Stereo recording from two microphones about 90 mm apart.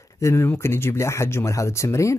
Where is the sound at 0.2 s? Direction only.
30° left (ahead or behind).